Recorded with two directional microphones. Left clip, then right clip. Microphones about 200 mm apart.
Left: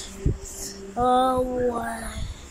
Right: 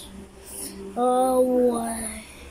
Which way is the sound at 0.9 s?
10° right (ahead or behind).